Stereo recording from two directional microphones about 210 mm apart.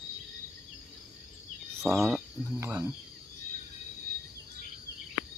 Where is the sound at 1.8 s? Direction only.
Centre (ahead or behind).